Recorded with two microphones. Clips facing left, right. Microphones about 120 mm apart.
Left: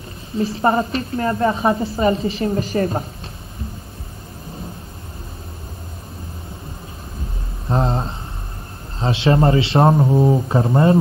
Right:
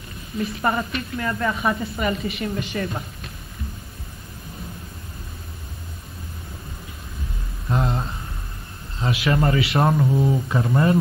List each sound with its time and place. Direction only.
0.4 s a woman's voice: 30° left (ahead or behind)
7.6 s a sound: 30° left (ahead or behind)
9.0 s a woman's voice: 30° left (ahead or behind)